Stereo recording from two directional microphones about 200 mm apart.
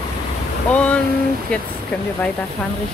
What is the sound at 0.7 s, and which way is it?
Speech, 5° left (ahead or behind).